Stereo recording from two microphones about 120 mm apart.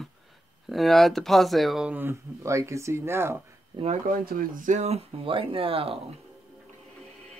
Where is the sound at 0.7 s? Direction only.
Centre (ahead or behind).